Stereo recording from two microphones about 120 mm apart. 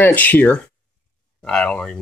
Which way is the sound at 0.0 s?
15° left (ahead or behind).